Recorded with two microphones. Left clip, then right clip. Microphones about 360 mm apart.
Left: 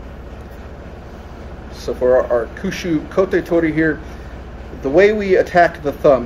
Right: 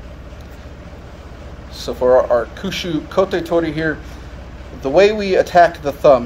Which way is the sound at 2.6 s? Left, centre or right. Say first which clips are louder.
Left 1 dB; right.